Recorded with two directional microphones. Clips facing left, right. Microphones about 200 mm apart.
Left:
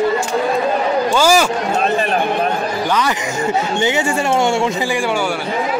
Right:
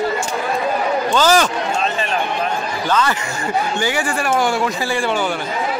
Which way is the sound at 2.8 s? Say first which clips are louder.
Right 2 dB; 15° left (ahead or behind).